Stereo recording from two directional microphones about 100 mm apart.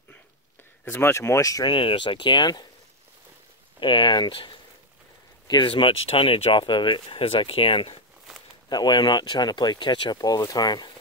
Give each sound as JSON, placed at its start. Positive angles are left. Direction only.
{"t": 0.8, "sound": "speech", "side_deg": 20}
{"t": 1.7, "sound": "speech", "side_deg": 60}
{"t": 3.8, "sound": "speech", "side_deg": 50}
{"t": 8.6, "sound": "speech", "side_deg": 45}
{"t": 10.1, "sound": "speech", "side_deg": 35}